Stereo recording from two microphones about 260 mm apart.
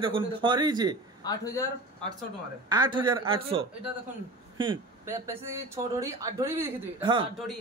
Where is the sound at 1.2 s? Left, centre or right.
Centre.